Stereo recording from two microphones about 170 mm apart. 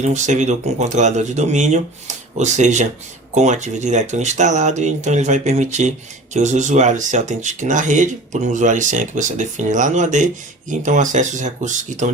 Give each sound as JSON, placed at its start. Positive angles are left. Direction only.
{"t": 0.0, "sound": "speech", "side_deg": -45}